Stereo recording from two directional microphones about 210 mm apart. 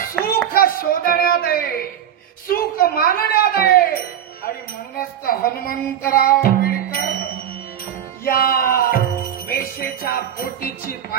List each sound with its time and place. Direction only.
0.2 s a sound: 45° left (ahead or behind)
2.5 s speech: 45° left (ahead or behind)
5.2 s music: 45° left (ahead or behind)
8.3 s music: 45° left (ahead or behind)